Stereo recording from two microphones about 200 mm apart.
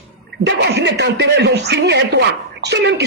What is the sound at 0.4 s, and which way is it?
Speech, 60° right (ahead or behind).